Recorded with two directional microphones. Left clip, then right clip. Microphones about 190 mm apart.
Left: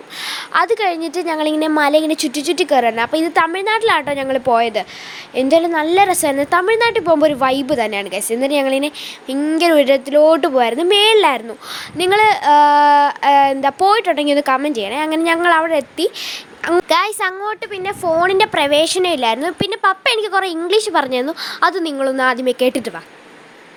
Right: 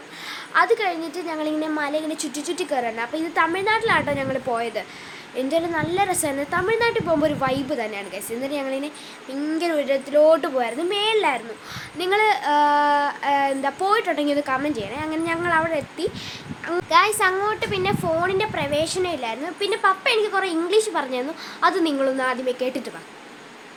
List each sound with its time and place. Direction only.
0.3 s speech: 45° left (ahead or behind)